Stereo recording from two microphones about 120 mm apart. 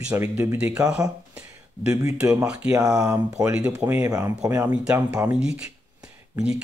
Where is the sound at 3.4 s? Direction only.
10° right (ahead or behind).